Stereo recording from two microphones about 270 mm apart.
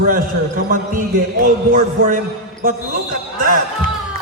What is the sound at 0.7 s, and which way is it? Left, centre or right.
A man's voice, right.